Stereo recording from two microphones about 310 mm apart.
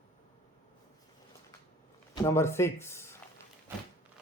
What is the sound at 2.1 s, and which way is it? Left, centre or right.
Speech, centre.